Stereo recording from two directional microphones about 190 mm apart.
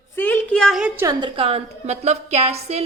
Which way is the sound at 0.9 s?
15° right (ahead or behind).